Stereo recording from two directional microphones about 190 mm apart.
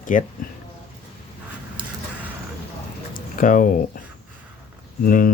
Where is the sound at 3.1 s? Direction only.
45° left (ahead or behind).